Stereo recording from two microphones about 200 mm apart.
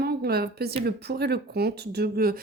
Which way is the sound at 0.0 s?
50° right (ahead or behind).